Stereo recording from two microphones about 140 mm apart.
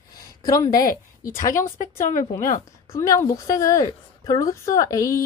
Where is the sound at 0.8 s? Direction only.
85° left.